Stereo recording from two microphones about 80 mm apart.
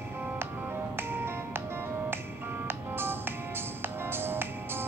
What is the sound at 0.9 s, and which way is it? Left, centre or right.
Music, right.